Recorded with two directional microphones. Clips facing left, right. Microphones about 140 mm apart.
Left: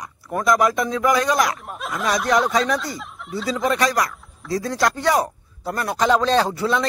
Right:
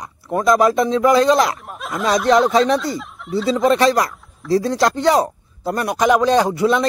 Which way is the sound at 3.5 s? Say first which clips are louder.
Right 6 dB; 25° right (ahead or behind).